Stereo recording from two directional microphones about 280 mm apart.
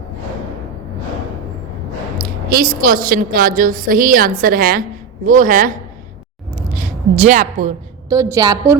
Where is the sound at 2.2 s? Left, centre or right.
Right.